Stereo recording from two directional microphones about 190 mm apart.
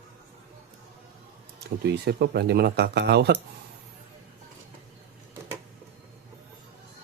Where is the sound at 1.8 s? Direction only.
60° right (ahead or behind).